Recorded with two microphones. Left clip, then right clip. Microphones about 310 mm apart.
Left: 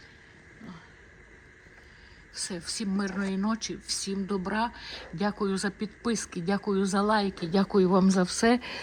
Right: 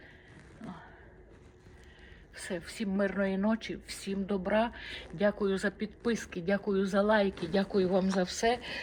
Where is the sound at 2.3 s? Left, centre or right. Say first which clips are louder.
Left 3 dB; centre.